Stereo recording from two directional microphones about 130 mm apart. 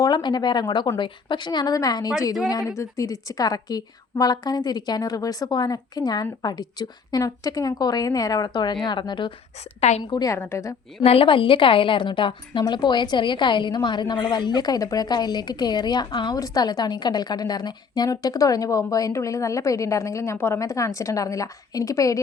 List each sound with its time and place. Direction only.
0.0 s a woman's voice: 35° left (ahead or behind)
10.3 s a woman's voice: 20° left (ahead or behind)
11.0 s a woman's voice: 45° left (ahead or behind); by 22.2 s 25° left (ahead or behind)